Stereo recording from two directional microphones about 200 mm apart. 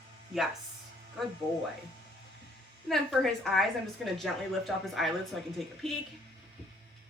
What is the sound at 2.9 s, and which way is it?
Speech, centre (ahead or behind).